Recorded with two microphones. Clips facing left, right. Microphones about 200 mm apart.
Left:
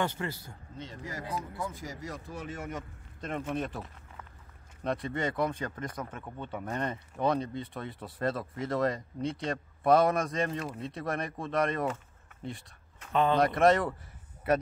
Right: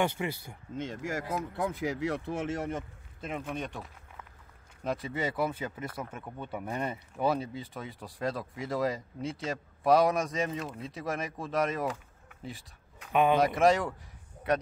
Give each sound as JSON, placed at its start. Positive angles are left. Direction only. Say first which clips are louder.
{"t": 0.0, "sound": "speech", "louder": "right 2 dB", "side_deg": -15}
{"t": 0.8, "sound": "speech", "louder": "right 6 dB", "side_deg": -90}
{"t": 1.3, "sound": "speech", "louder": "right 2 dB", "side_deg": -65}
{"t": 3.2, "sound": "speech", "louder": "left 2 dB", "side_deg": -5}
{"t": 12.4, "sound": "a sound", "louder": "left 3 dB", "side_deg": 0}
{"t": 13.1, "sound": "speech", "louder": "right 2 dB", "side_deg": -15}
{"t": 13.4, "sound": "speech", "louder": "left 1 dB", "side_deg": 0}